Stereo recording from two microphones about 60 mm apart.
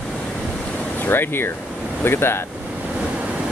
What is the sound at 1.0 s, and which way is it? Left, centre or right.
Speech, left.